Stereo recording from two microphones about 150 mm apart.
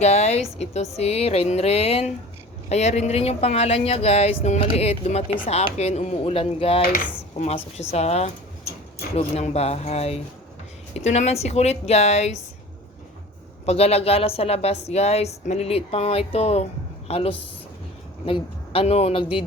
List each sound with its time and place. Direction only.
0.0 s a woman's voice: 45° left (ahead or behind)
6.8 s a woman's voice: 55° left (ahead or behind)
13.7 s a woman's voice: 45° left (ahead or behind)